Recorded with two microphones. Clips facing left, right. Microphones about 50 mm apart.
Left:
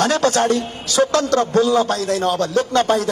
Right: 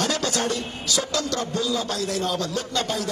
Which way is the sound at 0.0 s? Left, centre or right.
Left.